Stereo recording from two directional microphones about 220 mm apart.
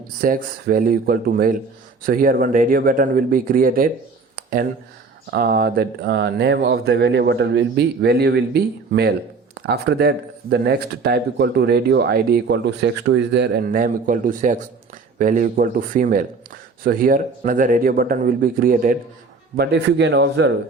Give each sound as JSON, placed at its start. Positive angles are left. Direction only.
{"t": 0.2, "sound": "a man's voice", "side_deg": -40}
{"t": 5.3, "sound": "a man's voice", "side_deg": -45}